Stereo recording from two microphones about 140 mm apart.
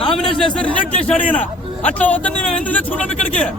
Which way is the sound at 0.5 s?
10° left (ahead or behind).